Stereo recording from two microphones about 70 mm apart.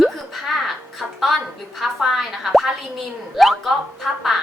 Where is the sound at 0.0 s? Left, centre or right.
Centre.